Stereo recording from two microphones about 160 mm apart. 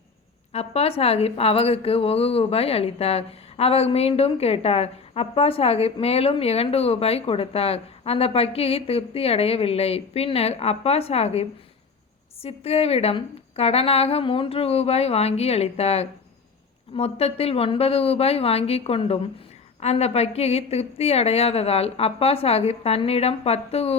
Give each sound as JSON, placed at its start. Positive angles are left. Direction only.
{"t": 0.5, "sound": "a woman's voice", "side_deg": 40}